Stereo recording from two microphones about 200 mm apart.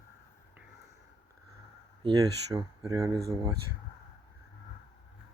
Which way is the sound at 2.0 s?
20° right (ahead or behind).